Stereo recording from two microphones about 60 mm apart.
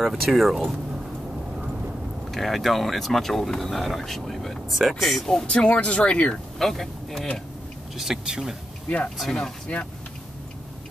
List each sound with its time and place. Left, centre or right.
0.0 s speech: centre
2.3 s speech: centre
5.5 s speech: centre
6.6 s speech: centre
8.0 s speech: centre
8.8 s speech: left